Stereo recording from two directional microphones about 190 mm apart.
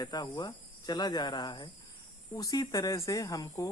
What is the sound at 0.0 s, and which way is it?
A woman's voice, 20° left (ahead or behind).